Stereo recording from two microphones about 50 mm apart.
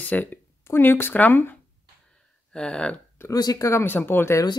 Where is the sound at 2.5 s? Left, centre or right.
Centre.